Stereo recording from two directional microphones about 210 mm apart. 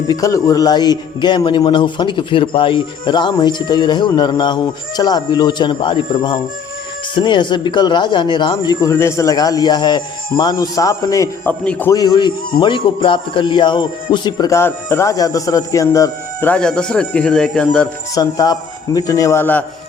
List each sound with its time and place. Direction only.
0.1 s a man's voice: 15° left (ahead or behind)
18.1 s speech: 20° left (ahead or behind)